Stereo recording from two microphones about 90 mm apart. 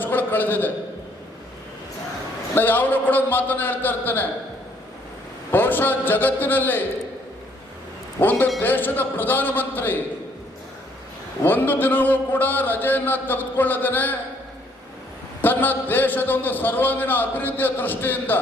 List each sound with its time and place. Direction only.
0.0 s a sound: 20° left (ahead or behind)
2.6 s a man's voice: 20° left (ahead or behind)
5.5 s a man's voice: 20° left (ahead or behind)
8.2 s a man's voice: 20° left (ahead or behind)
11.4 s a man's voice: 20° left (ahead or behind)
15.4 s a man's voice: 20° left (ahead or behind)